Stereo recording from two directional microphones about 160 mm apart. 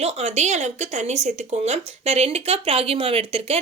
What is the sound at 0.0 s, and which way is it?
Speech, 40° right (ahead or behind).